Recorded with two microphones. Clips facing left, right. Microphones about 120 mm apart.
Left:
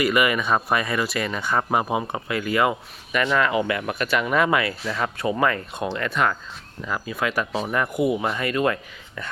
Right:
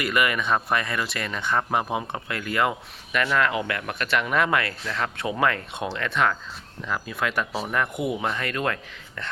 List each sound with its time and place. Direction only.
0.0 s speech: 5° left (ahead or behind)